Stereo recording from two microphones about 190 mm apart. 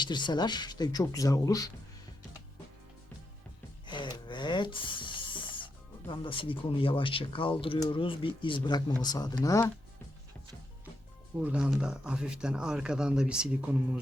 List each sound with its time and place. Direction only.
0.0 s speech: 25° left (ahead or behind)
3.8 s a sound: 25° left (ahead or behind)
6.1 s speech: 25° left (ahead or behind)
11.3 s speech: 5° right (ahead or behind)